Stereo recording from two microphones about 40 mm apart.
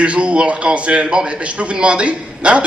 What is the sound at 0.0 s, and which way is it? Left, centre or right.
A man's voice, right.